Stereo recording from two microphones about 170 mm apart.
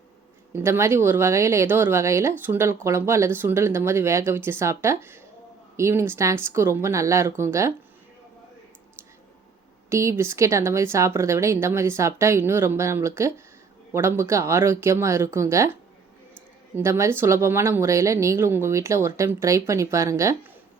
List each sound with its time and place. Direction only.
0.5 s speech: 15° right (ahead or behind)
9.9 s speech: 15° right (ahead or behind)
16.7 s speech: 15° right (ahead or behind)